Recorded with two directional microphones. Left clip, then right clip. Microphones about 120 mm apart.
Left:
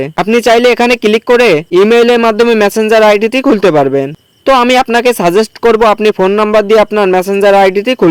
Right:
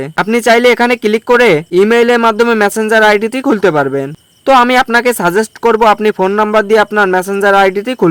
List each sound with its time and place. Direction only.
0.0 s speech: 20° left (ahead or behind)